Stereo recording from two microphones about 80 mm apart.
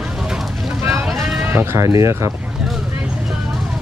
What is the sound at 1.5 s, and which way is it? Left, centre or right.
Speech, right.